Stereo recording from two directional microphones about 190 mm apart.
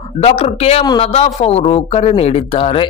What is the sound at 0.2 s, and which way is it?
A man's voice, 30° left (ahead or behind).